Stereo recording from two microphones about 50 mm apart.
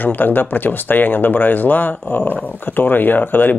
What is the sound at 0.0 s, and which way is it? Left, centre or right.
Speech, left.